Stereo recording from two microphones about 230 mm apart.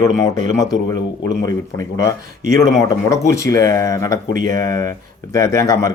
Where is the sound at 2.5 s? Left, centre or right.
Centre.